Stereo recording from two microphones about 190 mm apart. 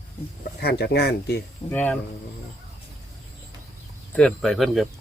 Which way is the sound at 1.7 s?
10° left (ahead or behind).